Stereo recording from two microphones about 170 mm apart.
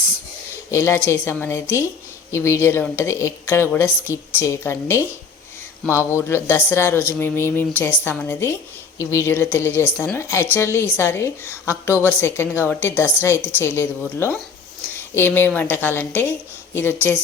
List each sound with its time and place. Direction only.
0.7 s a woman's voice: 15° left (ahead or behind)
14.9 s a sound: 15° left (ahead or behind)
15.4 s a woman's voice: 10° left (ahead or behind)